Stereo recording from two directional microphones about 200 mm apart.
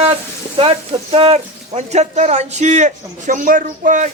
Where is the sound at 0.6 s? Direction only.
30° right (ahead or behind).